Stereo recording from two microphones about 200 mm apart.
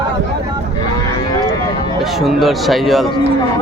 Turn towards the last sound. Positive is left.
turn(degrees=0)  # may be behind; listen again after turning